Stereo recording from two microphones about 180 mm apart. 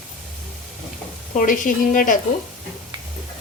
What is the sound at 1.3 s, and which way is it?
Speech, 50° left (ahead or behind).